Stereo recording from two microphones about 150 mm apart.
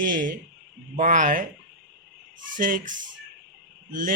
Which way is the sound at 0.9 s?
60° right (ahead or behind).